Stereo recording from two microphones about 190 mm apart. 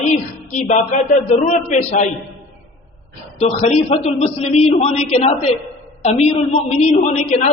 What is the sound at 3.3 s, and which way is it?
A man's voice, 30° left (ahead or behind).